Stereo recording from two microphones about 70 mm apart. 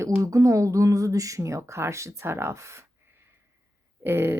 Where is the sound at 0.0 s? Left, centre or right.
Right.